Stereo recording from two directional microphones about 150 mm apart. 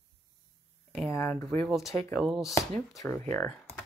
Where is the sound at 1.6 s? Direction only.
Centre (ahead or behind).